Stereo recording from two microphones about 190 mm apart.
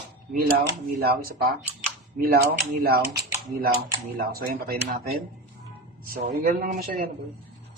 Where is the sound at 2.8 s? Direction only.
55° right (ahead or behind).